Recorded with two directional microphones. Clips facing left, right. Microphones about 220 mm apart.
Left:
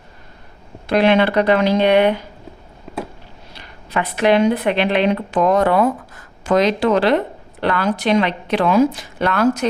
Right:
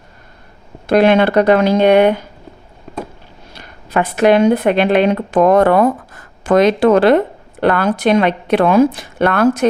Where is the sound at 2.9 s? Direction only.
Centre (ahead or behind).